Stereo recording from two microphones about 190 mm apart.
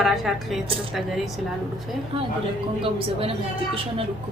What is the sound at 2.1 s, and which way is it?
A woman's voice, 30° right (ahead or behind).